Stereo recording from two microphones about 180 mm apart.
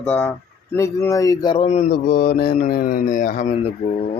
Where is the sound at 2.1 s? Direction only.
60° left (ahead or behind); by 3.7 s 40° left (ahead or behind).